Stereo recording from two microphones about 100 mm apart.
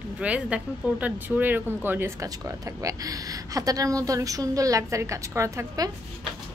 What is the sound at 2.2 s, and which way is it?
A woman's voice, 35° right (ahead or behind).